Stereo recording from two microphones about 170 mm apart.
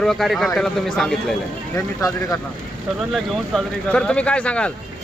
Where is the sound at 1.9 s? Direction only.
20° left (ahead or behind).